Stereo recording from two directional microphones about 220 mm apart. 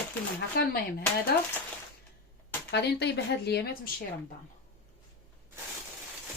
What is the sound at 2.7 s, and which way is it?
Speech, 50° left (ahead or behind).